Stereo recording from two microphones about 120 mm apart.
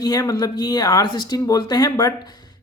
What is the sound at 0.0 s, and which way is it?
Speech, 30° left (ahead or behind).